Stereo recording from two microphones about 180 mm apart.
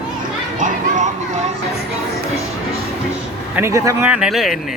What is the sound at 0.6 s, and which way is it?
Children playing, 45° right (ahead or behind).